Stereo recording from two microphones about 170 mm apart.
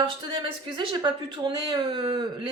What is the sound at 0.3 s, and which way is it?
A woman's voice, 30° right (ahead or behind).